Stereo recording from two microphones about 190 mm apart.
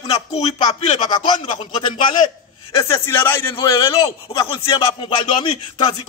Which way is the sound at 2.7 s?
15° left (ahead or behind).